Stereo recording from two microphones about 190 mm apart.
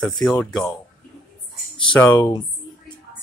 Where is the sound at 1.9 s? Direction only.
10° left (ahead or behind).